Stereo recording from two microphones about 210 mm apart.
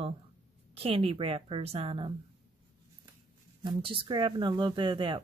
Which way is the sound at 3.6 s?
25° right (ahead or behind).